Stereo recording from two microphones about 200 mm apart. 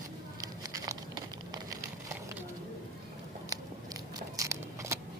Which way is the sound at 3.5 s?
15° right (ahead or behind).